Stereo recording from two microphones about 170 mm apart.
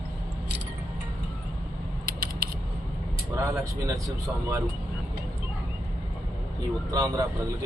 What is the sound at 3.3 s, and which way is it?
Speech, 20° right (ahead or behind).